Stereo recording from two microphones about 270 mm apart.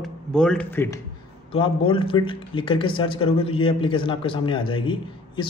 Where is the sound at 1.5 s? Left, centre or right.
Centre.